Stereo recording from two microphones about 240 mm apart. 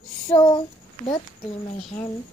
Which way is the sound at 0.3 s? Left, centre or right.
Centre.